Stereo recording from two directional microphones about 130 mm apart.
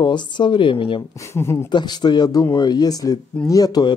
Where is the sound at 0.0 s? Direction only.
35° left (ahead or behind).